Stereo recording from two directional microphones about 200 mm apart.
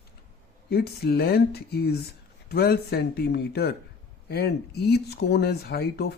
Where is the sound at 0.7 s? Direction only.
50° left (ahead or behind).